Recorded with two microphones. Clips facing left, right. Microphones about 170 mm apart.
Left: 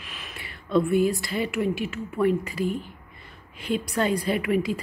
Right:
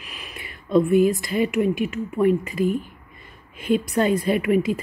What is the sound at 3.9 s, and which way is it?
Speech, 20° right (ahead or behind).